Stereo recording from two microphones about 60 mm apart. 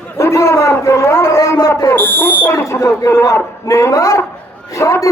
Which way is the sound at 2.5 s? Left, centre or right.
Left.